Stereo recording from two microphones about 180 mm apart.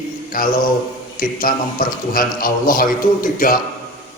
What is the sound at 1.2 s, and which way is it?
A man's voice, 50° left (ahead or behind).